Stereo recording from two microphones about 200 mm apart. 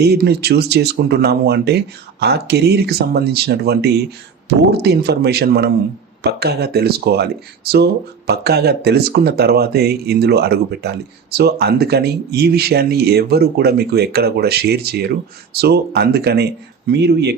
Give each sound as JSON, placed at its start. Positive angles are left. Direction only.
{"t": 0.0, "sound": "speech", "side_deg": -55}